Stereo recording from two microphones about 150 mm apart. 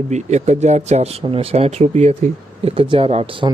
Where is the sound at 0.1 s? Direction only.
50° right (ahead or behind).